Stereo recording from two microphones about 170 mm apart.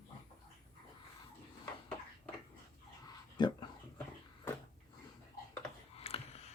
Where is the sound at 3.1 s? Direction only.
25° left (ahead or behind).